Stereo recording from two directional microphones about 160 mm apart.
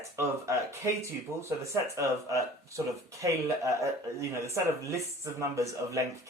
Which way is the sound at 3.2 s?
20° right (ahead or behind).